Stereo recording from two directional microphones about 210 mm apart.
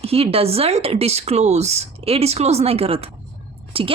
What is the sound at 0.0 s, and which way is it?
A woman's voice, 30° right (ahead or behind).